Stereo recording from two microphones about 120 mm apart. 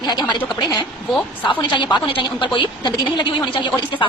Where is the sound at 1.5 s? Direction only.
40° left (ahead or behind).